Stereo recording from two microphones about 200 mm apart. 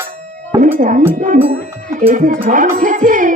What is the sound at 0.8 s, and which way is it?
Music, 40° right (ahead or behind).